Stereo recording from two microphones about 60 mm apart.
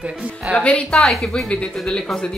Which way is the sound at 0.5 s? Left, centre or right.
Right.